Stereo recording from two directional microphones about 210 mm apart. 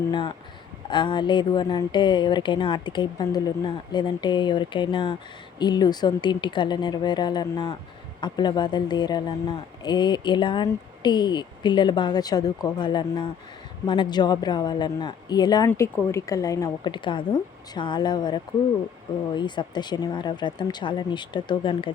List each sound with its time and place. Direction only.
0.1 s a woman's voice: 20° left (ahead or behind)